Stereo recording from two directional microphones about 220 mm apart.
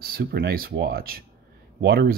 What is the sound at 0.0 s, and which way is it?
Speech, 45° right (ahead or behind).